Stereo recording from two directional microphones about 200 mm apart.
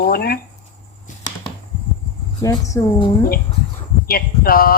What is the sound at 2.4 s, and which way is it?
Speech, 15° left (ahead or behind).